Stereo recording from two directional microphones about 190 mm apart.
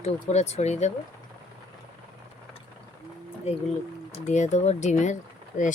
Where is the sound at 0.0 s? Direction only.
35° left (ahead or behind).